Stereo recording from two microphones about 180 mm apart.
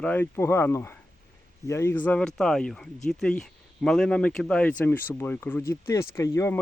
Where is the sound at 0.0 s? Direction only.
10° left (ahead or behind).